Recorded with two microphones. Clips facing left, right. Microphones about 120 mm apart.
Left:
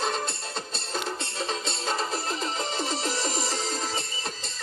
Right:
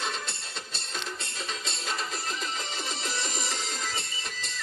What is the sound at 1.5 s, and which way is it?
Music, 35° left (ahead or behind).